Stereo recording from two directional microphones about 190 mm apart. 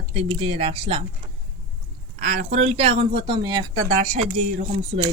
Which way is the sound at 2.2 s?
40° right (ahead or behind).